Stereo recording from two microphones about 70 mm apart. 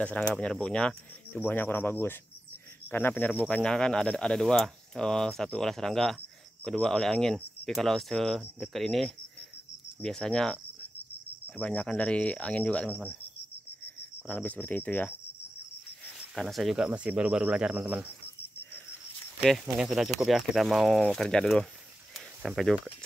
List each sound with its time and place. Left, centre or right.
0.0 s speech: centre
1.3 s speech: left
14.2 s speech: left
16.3 s speech: centre
16.8 s speech: centre
19.8 s speech: centre